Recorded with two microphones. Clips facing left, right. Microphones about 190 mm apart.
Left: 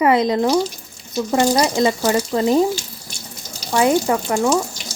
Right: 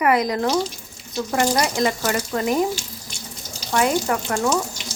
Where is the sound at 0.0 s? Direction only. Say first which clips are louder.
Left 4 dB; 25° left (ahead or behind).